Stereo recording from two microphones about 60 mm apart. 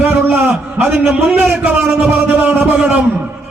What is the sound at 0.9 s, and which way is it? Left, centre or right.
Speech, centre.